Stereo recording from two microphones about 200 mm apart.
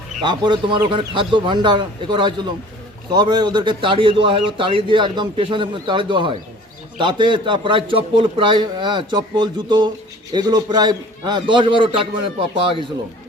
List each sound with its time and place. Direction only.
0.2 s a man's voice: 25° right (ahead or behind)